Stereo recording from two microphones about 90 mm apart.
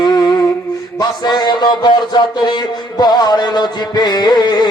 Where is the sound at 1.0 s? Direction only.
50° left (ahead or behind).